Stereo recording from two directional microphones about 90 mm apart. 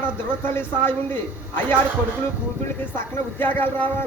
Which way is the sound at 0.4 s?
25° left (ahead or behind).